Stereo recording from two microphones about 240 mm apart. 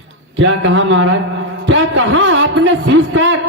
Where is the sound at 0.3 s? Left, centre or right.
Right.